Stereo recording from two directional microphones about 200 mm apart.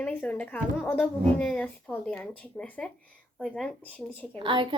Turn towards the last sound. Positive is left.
turn(degrees=-25)  # may be behind; listen again after turning